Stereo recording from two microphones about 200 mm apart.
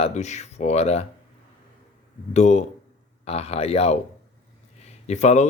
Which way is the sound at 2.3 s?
35° left (ahead or behind).